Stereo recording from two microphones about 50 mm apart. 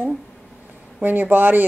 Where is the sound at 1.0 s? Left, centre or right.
Right.